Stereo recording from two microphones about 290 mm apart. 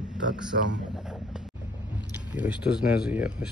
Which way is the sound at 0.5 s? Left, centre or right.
Right.